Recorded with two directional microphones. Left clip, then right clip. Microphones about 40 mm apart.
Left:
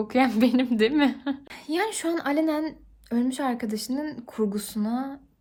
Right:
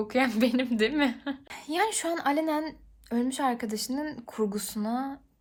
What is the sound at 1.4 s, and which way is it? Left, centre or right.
A woman's voice, left.